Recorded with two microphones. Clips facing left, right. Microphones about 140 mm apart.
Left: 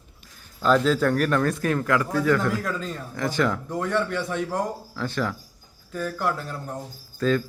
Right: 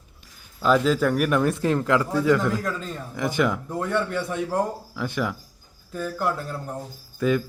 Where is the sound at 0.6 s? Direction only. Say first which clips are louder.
Even; 10° right (ahead or behind).